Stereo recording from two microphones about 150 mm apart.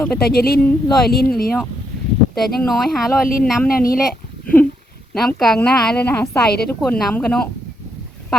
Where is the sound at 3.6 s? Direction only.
75° left (ahead or behind).